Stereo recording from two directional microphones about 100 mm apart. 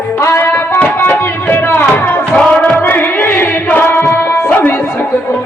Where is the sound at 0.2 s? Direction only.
25° left (ahead or behind).